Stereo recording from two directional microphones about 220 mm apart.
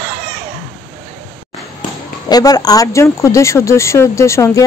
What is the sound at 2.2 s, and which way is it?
Speech, 15° left (ahead or behind).